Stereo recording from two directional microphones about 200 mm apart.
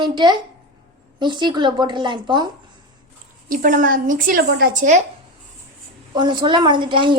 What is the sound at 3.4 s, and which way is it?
Speech, 45° right (ahead or behind).